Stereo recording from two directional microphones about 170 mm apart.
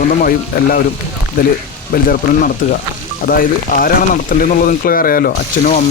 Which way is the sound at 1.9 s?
55° left (ahead or behind).